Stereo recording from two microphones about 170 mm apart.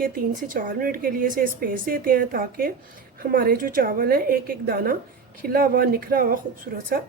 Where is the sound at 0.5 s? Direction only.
55° right (ahead or behind).